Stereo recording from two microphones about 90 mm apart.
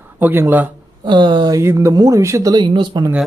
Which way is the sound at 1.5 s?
35° right (ahead or behind).